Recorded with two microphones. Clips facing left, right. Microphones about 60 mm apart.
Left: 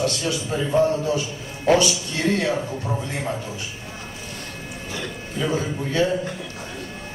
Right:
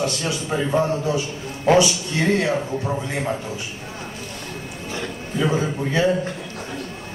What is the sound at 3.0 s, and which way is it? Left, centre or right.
Speech, right.